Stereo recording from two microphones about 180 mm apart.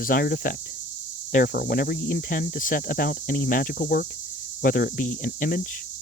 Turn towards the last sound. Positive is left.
turn(degrees=50)  # may be behind; listen again after turning